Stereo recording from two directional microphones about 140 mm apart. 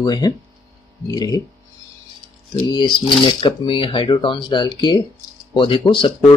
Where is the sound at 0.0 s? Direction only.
30° left (ahead or behind).